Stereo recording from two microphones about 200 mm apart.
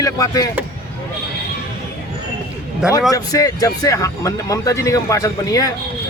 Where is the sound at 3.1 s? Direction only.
15° left (ahead or behind).